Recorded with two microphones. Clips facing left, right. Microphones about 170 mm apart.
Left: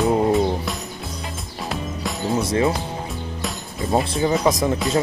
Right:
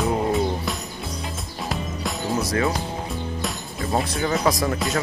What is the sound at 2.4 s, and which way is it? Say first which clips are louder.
Speech: left 4 dB; 25° left (ahead or behind).